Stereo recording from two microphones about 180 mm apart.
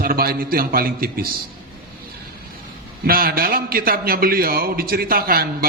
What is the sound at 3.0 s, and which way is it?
A man's voice, 55° right (ahead or behind).